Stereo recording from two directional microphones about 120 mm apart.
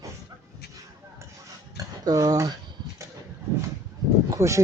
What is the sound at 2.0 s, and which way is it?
Speech, 30° right (ahead or behind).